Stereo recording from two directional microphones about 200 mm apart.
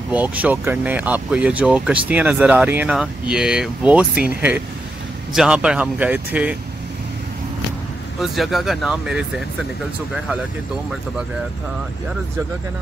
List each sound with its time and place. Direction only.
0.1 s speech: 5° right (ahead or behind)
8.2 s speech: centre (ahead or behind)